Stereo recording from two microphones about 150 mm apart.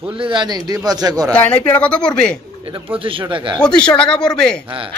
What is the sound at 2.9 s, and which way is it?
Speech, 35° right (ahead or behind).